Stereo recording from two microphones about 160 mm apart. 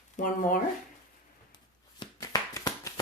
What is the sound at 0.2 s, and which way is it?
Speech, 55° left (ahead or behind).